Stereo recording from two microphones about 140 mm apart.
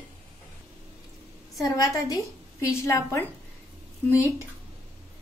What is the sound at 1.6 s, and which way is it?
A woman's voice, 25° left (ahead or behind).